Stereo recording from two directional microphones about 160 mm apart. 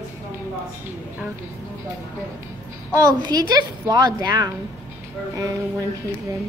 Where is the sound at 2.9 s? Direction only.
20° right (ahead or behind).